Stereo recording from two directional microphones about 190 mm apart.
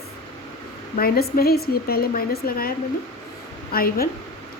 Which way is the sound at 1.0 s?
55° left (ahead or behind).